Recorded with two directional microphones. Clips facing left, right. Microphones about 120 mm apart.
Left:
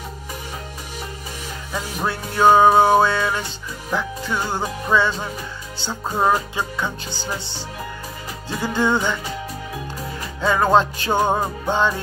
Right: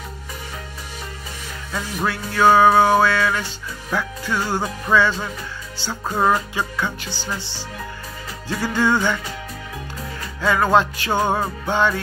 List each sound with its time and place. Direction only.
2.0 s music: 25° left (ahead or behind)
8.5 s music: 15° left (ahead or behind)
10.4 s music: 25° left (ahead or behind)
11.1 s music: 15° left (ahead or behind)